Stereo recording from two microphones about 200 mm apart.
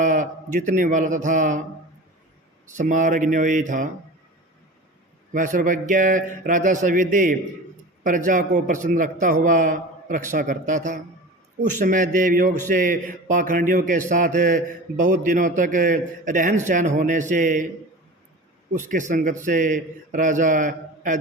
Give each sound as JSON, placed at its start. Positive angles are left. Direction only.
{"t": 0.0, "sound": "a man's voice", "side_deg": -40}
{"t": 2.7, "sound": "a man's voice", "side_deg": -40}
{"t": 5.3, "sound": "a man's voice", "side_deg": -40}
{"t": 18.7, "sound": "a man's voice", "side_deg": -40}